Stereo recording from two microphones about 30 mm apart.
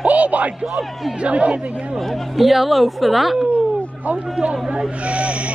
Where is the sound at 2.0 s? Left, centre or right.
Centre.